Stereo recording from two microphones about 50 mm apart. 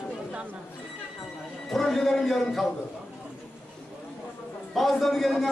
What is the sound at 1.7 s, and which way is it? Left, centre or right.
Speech, centre.